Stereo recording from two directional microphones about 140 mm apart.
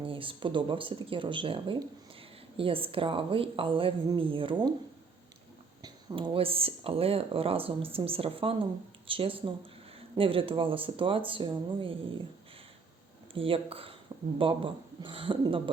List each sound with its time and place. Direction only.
0.0 s speech: 40° right (ahead or behind)
5.8 s speech: 30° right (ahead or behind)
13.3 s speech: 40° right (ahead or behind)